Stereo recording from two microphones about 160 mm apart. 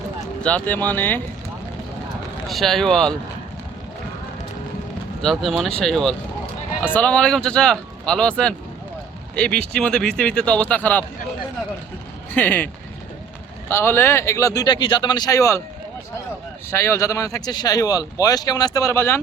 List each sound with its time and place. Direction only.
0.4 s speech: 10° left (ahead or behind)
2.5 s speech: centre (ahead or behind)
5.2 s speech: centre (ahead or behind)
12.3 s speech: 10° left (ahead or behind)
16.7 s speech: 15° left (ahead or behind)